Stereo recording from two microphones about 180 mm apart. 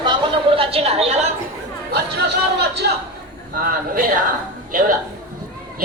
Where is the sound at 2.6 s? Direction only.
65° right (ahead or behind).